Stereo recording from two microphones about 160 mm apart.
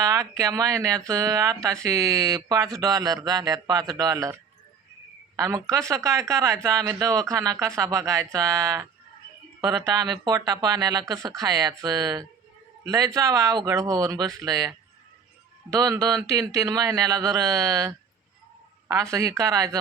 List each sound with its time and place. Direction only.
0.0 s speech: 20° right (ahead or behind)
5.4 s a man's voice: 20° right (ahead or behind)